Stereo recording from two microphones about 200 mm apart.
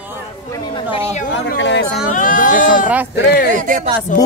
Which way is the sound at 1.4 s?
60° left (ahead or behind).